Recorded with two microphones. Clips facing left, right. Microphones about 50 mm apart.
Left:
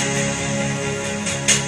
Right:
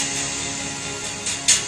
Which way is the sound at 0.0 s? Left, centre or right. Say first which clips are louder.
Left 7 dB; left.